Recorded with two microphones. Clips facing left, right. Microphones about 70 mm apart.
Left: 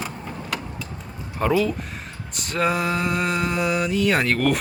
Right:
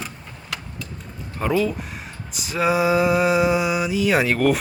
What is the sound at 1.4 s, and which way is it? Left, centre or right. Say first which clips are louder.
Speech: left 1 dB; centre.